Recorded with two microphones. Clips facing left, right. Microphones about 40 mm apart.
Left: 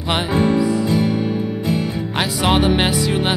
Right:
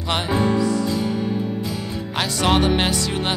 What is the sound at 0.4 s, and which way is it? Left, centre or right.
Music, left.